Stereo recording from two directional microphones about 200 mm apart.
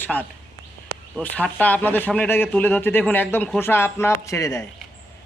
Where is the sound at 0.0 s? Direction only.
10° left (ahead or behind).